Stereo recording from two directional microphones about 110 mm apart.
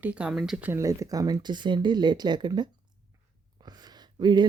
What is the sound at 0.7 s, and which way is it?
Speech, 30° right (ahead or behind).